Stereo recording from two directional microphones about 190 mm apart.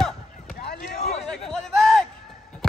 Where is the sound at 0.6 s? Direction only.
60° left (ahead or behind).